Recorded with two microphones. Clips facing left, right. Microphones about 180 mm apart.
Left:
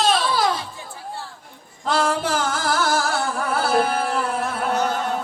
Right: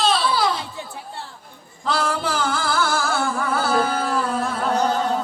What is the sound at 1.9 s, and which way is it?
Music, 45° left (ahead or behind).